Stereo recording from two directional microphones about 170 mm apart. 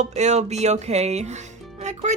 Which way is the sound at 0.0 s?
40° right (ahead or behind).